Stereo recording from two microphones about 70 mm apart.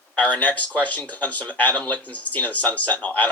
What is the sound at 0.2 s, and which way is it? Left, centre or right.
Speech, left.